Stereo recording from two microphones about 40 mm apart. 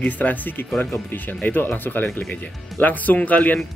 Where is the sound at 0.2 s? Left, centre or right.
Left.